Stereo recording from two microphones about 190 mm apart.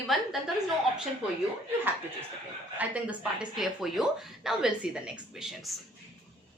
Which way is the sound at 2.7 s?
5° right (ahead or behind).